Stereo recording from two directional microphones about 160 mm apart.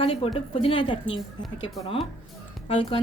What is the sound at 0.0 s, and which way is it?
Speech, 40° left (ahead or behind).